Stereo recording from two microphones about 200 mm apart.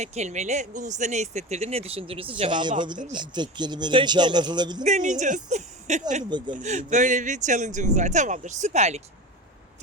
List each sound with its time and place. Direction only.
0.0 s a man's voice: 35° right (ahead or behind)
4.8 s speech: 40° right (ahead or behind)